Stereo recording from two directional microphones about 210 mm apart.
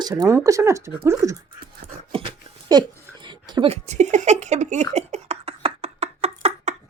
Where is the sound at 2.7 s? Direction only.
20° right (ahead or behind).